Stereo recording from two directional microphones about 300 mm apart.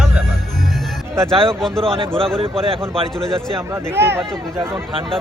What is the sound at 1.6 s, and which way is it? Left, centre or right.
Speech, centre.